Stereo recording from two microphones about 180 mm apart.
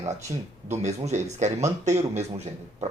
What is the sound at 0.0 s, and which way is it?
A man's voice, 40° right (ahead or behind).